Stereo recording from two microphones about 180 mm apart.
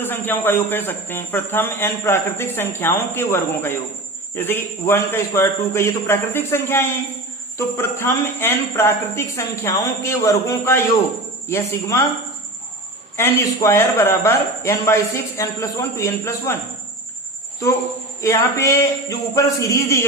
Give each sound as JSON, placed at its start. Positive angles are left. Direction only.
{"t": 0.0, "sound": "speech", "side_deg": 10}
{"t": 13.1, "sound": "speech", "side_deg": 15}
{"t": 18.2, "sound": "speech", "side_deg": 15}